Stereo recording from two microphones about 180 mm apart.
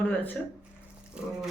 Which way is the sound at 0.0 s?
10° left (ahead or behind).